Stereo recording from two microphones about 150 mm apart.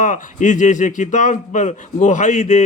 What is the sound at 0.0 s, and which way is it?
Speech, 55° left (ahead or behind).